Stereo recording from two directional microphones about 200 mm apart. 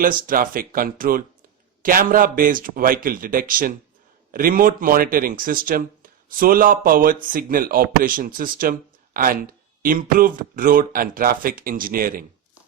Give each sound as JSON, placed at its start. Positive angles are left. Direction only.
{"t": 0.0, "sound": "speech", "side_deg": -45}